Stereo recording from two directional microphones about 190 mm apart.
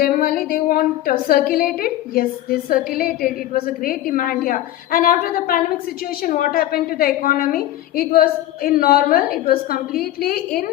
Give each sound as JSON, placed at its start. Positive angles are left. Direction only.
{"t": 0.0, "sound": "a woman's voice", "side_deg": 50}